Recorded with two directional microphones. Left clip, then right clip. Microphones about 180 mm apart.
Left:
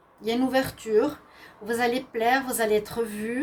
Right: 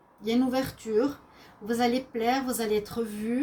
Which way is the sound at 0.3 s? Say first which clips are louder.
Left 3 dB; 45° left (ahead or behind).